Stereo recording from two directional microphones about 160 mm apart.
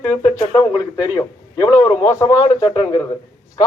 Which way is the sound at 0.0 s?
25° left (ahead or behind).